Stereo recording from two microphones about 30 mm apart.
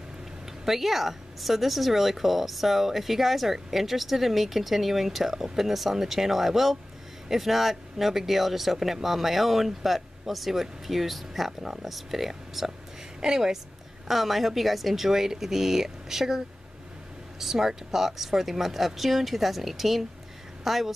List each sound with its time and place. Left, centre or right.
0.7 s a woman's voice: centre
14.0 s a woman's voice: centre